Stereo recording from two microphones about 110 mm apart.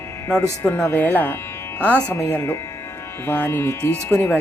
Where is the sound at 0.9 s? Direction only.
15° left (ahead or behind).